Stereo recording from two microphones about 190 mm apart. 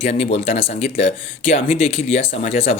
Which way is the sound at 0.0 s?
35° left (ahead or behind).